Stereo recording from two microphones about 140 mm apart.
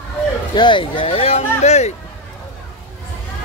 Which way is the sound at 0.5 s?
35° left (ahead or behind).